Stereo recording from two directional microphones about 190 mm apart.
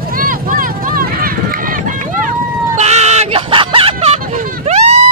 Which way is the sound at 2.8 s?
35° right (ahead or behind).